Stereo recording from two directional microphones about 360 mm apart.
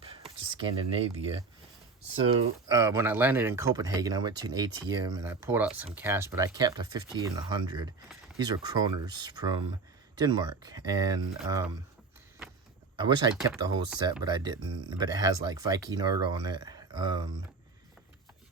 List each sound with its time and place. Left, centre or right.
0.0 s a sound: centre
1.0 s speech: centre
13.0 s speech: centre
13.3 s speech: centre